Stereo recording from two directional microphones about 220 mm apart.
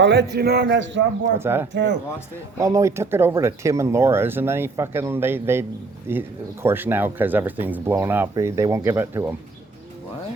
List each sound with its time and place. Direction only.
0.0 s a man's voice: 50° right (ahead or behind)
1.4 s speech: 10° right (ahead or behind)
1.7 s a man's voice: 50° right (ahead or behind)
2.6 s speech: 15° right (ahead or behind)